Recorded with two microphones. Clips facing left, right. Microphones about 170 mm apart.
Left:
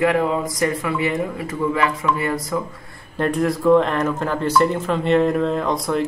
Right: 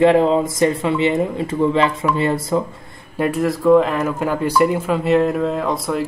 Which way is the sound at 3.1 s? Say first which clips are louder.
Right 1 dB; 5° right (ahead or behind).